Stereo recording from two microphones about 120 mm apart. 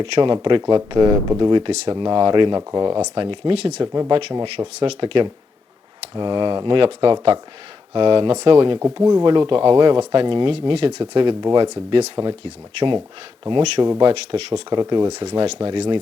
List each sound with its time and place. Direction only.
0.0 s speech: 45° right (ahead or behind)
3.2 s speech: 45° right (ahead or behind)
3.6 s speech: 65° right (ahead or behind)
4.5 s speech: 55° right (ahead or behind)
9.0 s speech: 35° right (ahead or behind); by 14.6 s 60° right (ahead or behind)
14.7 s speech: 40° right (ahead or behind)
15.2 s speech: 60° right (ahead or behind)
15.5 s speech: 45° right (ahead or behind)